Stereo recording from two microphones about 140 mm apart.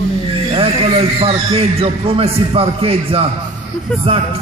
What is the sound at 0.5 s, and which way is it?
A man's voice, 45° right (ahead or behind).